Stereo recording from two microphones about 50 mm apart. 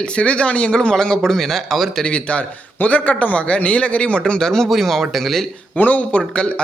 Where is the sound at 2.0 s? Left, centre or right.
Left.